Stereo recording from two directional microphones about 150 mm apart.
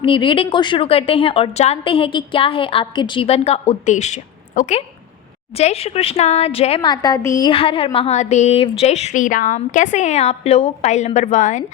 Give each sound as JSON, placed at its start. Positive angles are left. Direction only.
{"t": 0.0, "sound": "a woman's voice", "side_deg": 35}
{"t": 5.5, "sound": "a woman's voice", "side_deg": 45}
{"t": 7.5, "sound": "a woman's voice", "side_deg": 35}